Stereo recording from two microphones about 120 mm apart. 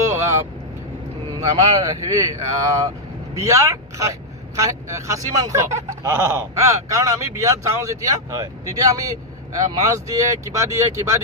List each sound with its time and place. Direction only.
0.0 s vehicle: 20° right (ahead or behind)
1.4 s speech: 30° right (ahead or behind)
3.3 s speech: 25° right (ahead or behind)